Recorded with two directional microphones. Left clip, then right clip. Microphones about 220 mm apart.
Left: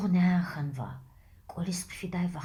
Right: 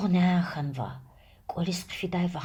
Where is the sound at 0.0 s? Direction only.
40° right (ahead or behind).